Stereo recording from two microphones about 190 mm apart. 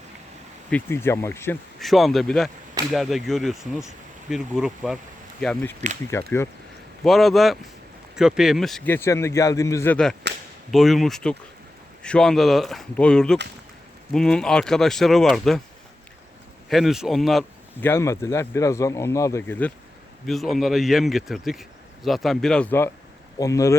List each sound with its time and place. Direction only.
0.7 s speech: 10° left (ahead or behind)
1.8 s speech: centre (ahead or behind)
7.0 s speech: centre (ahead or behind)
16.6 s speech: centre (ahead or behind)
17.8 s speech: 15° left (ahead or behind)